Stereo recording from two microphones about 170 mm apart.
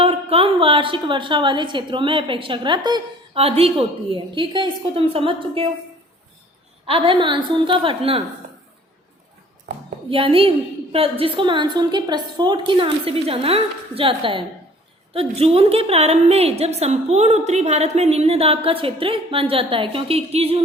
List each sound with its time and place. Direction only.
0.0 s a woman's voice: 35° right (ahead or behind)
6.8 s a woman's voice: 30° right (ahead or behind)
10.1 s a woman's voice: 35° right (ahead or behind)